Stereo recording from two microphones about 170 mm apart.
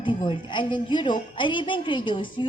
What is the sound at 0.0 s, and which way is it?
A woman's voice, 30° left (ahead or behind).